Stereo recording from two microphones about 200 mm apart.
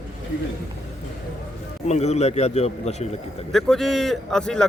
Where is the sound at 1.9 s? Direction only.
35° left (ahead or behind).